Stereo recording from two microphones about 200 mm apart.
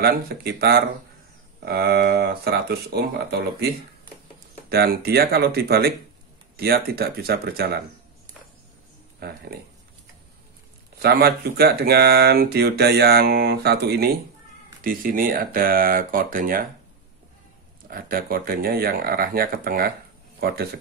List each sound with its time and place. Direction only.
0.0 s speech: 50° right (ahead or behind)
4.6 s speech: 50° right (ahead or behind)
9.2 s speech: 50° right (ahead or behind)
11.0 s speech: 50° right (ahead or behind)
17.8 s speech: 45° right (ahead or behind)